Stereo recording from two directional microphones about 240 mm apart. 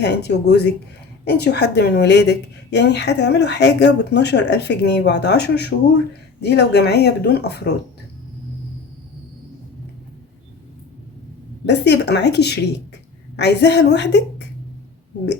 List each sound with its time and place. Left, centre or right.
0.0 s a woman's voice: left
11.6 s a woman's voice: left